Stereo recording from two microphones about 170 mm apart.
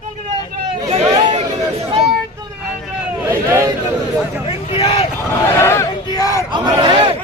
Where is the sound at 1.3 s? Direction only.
35° right (ahead or behind).